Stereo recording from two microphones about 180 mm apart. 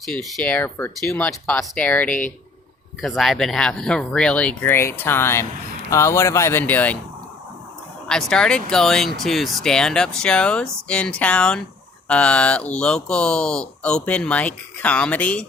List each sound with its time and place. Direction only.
0.3 s speech: 5° left (ahead or behind)
8.0 s speech: 5° left (ahead or behind)